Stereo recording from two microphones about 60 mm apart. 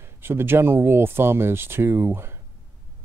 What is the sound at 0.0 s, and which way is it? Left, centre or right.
Speech, right.